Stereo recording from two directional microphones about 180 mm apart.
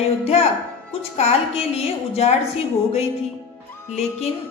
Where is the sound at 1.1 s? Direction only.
35° left (ahead or behind).